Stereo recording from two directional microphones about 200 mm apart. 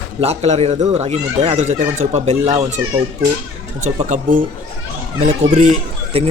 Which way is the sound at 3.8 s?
35° right (ahead or behind).